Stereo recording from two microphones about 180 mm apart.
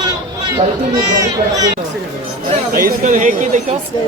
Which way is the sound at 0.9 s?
20° right (ahead or behind).